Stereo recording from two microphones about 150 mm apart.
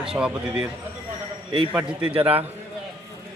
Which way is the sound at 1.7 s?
5° right (ahead or behind).